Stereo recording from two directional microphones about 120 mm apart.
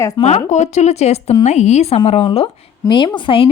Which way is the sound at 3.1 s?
45° left (ahead or behind).